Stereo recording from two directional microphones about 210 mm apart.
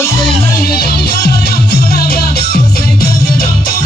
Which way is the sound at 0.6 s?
45° left (ahead or behind).